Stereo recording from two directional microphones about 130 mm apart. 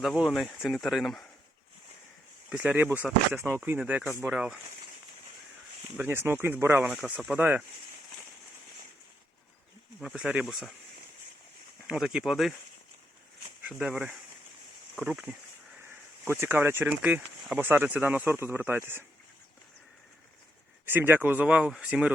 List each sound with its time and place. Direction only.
0.0 s speech: centre (ahead or behind)
2.5 s speech: 10° right (ahead or behind)
6.0 s speech: 15° right (ahead or behind)
10.0 s speech: 5° right (ahead or behind)
11.9 s speech: centre (ahead or behind)
13.7 s speech: 5° right (ahead or behind)
16.2 s speech: 20° right (ahead or behind)
20.8 s speech: 15° right (ahead or behind)